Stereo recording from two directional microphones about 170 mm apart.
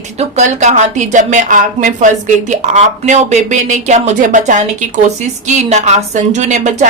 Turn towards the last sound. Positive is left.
turn(degrees=-45)  # may be behind; listen again after turning